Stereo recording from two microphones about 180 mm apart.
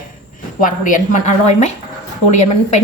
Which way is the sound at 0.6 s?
45° left (ahead or behind).